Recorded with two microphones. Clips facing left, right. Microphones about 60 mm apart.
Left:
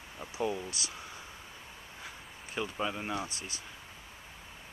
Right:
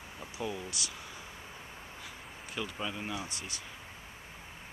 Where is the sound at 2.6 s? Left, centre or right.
Centre.